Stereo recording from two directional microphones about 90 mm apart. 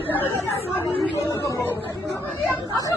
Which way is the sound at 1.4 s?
35° left (ahead or behind).